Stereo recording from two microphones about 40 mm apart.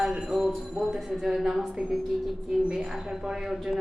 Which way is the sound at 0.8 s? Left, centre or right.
Centre.